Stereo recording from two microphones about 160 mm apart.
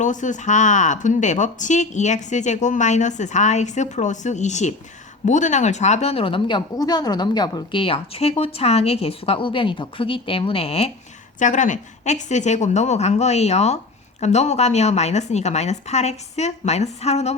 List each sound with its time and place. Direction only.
0.0 s speech: 50° left (ahead or behind)
11.3 s speech: 50° left (ahead or behind)